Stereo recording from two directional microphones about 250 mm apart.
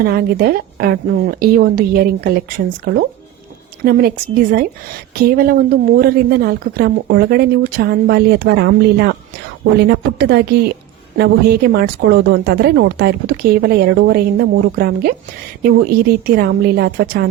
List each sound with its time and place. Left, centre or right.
0.0 s a woman's voice: right
5.1 s a woman's voice: right